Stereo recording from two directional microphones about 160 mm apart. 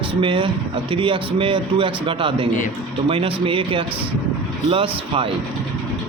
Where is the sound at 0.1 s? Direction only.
30° right (ahead or behind).